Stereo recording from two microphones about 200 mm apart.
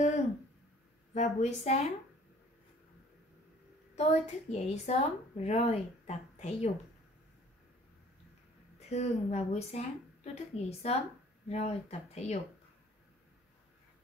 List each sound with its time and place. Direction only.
1.1 s speech: 35° left (ahead or behind)
3.9 s speech: 35° left (ahead or behind)
8.7 s speech: 35° left (ahead or behind)